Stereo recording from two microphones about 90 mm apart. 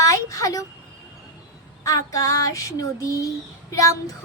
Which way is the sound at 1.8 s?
35° left (ahead or behind).